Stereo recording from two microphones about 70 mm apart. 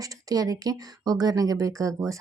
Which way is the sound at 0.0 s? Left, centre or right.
Right.